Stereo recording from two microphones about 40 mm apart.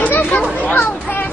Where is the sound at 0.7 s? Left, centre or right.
Left.